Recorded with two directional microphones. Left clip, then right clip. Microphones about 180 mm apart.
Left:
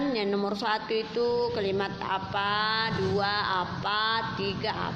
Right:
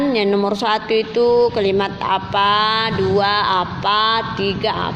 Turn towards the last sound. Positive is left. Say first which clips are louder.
# right 11 dB
turn(degrees=-40)  # may be behind; listen again after turning